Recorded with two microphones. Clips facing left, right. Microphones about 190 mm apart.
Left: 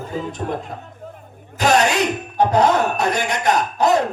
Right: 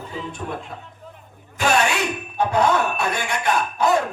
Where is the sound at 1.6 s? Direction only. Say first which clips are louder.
Left 4 dB; 40° left (ahead or behind).